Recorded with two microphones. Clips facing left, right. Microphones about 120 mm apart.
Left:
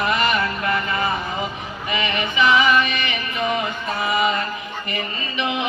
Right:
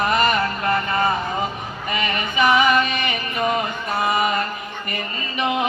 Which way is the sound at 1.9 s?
45° right (ahead or behind).